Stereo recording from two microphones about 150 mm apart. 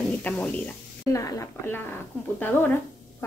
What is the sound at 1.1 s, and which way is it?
A woman's voice, 20° left (ahead or behind).